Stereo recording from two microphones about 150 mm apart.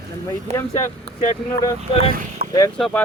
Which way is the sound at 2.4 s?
90° right.